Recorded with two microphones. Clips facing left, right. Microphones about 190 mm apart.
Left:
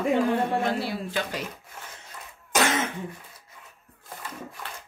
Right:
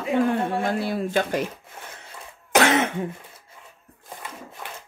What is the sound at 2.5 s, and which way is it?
Cough, 65° right (ahead or behind).